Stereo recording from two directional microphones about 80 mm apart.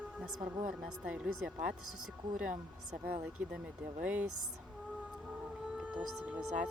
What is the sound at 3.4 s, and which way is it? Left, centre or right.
Speech, right.